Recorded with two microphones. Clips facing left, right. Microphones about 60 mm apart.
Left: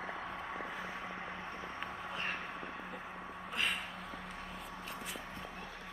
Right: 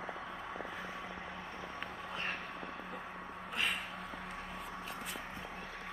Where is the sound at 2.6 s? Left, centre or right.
Centre.